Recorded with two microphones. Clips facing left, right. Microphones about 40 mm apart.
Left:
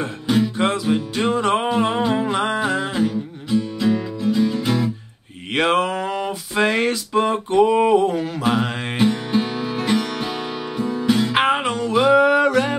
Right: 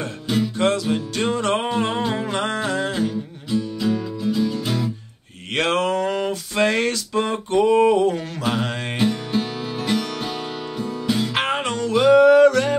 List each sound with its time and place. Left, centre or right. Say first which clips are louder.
0.0 s music: left 3 dB; centre
5.5 s a sound: left 2 dB; centre
10.8 s music: left 6 dB; left
11.1 s music: left 4 dB; centre